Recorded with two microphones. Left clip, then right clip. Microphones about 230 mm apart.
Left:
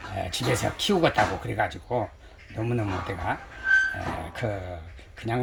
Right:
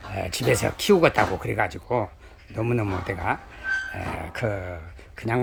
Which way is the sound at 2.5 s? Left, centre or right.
Right.